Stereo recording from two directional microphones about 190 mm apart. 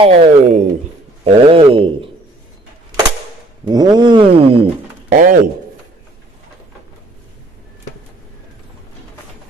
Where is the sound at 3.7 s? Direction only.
20° right (ahead or behind).